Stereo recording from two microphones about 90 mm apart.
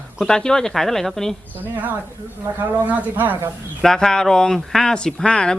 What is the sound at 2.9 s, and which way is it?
Speech, 20° right (ahead or behind).